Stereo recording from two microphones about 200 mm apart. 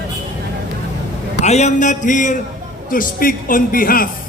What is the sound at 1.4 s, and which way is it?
A man's voice, 35° left (ahead or behind).